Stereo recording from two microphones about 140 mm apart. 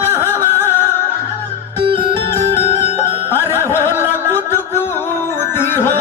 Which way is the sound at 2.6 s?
50° left (ahead or behind).